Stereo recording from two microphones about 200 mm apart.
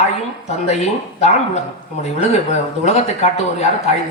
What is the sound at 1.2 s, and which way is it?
Speech, 35° left (ahead or behind).